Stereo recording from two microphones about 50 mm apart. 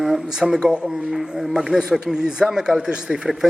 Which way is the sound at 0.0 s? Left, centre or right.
Centre.